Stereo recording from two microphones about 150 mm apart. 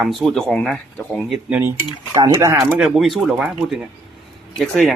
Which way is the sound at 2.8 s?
Centre (ahead or behind).